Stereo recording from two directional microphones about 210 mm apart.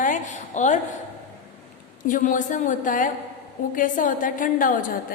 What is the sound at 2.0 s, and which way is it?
A woman's voice, 40° left (ahead or behind).